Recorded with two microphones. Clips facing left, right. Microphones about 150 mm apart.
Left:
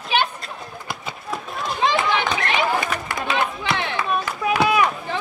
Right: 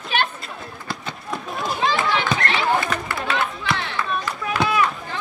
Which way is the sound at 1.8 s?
20° left (ahead or behind).